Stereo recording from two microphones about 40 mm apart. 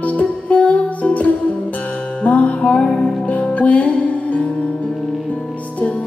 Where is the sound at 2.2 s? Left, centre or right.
Left.